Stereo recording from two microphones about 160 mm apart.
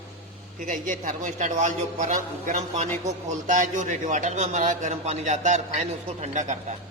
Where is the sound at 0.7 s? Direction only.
55° right (ahead or behind).